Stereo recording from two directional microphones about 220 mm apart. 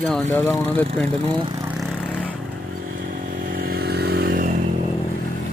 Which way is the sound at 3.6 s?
45° right (ahead or behind).